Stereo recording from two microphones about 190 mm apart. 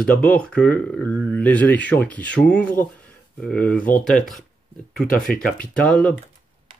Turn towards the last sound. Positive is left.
turn(degrees=5)  # may be behind; listen again after turning